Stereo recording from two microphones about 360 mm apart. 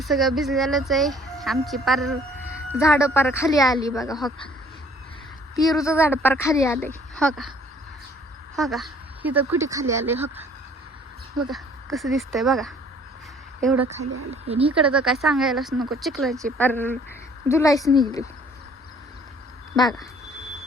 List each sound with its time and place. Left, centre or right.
0.0 s speech: centre
5.6 s speech: centre
8.5 s speech: centre
11.4 s speech: centre
14.0 s speech: right
14.4 s speech: centre
14.8 s speech: centre